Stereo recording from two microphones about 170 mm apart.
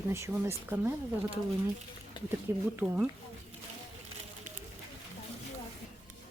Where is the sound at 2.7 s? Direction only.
10° right (ahead or behind).